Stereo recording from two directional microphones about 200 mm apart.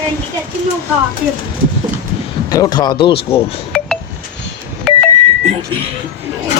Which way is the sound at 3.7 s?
Centre (ahead or behind).